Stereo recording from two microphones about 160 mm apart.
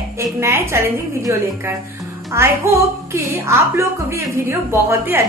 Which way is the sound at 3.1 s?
15° right (ahead or behind).